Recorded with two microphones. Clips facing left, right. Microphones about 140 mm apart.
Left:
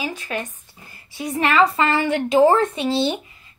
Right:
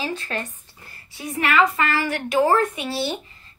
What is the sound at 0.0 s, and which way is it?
A woman's voice, 15° left (ahead or behind).